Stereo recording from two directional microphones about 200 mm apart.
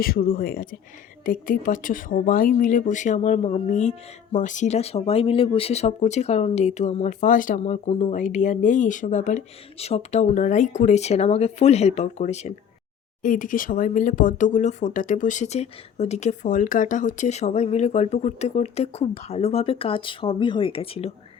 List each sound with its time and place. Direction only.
0.0 s speech: 45° left (ahead or behind); by 21.1 s 30° left (ahead or behind)